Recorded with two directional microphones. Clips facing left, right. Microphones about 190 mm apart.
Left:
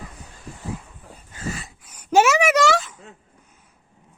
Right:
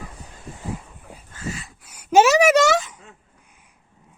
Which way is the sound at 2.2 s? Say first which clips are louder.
Right 3 dB; 40° right (ahead or behind).